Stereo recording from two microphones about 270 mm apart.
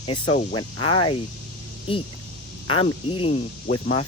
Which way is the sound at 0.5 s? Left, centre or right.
Centre.